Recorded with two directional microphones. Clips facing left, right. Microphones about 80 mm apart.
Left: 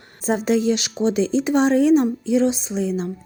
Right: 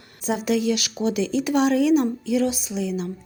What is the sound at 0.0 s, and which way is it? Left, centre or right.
Speech, left.